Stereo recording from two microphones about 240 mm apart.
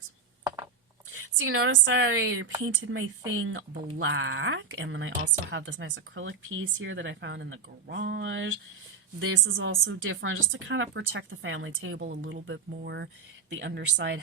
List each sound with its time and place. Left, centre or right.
1.4 s a woman's voice: right